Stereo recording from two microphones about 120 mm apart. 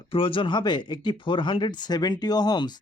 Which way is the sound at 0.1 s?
45° left (ahead or behind).